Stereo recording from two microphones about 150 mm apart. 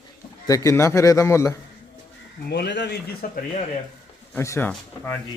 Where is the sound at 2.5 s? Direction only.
90° left.